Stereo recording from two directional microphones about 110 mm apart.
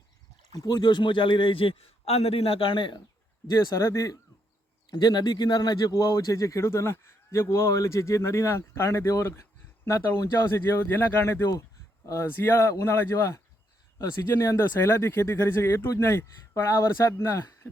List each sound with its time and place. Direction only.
0.5 s a man's voice: 35° left (ahead or behind)
3.5 s a man's voice: 30° left (ahead or behind)